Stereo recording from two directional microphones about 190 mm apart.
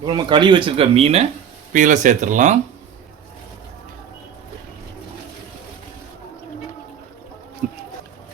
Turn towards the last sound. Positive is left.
turn(degrees=-45)  # may be behind; listen again after turning